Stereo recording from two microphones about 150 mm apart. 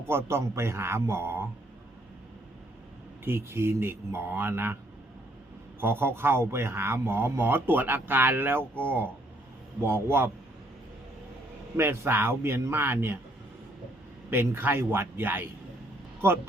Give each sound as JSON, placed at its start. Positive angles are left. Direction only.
{"t": 0.1, "sound": "speech", "side_deg": -15}
{"t": 3.2, "sound": "speech", "side_deg": -15}
{"t": 5.8, "sound": "speech", "side_deg": -15}
{"t": 11.8, "sound": "speech", "side_deg": -15}
{"t": 14.3, "sound": "speech", "side_deg": -15}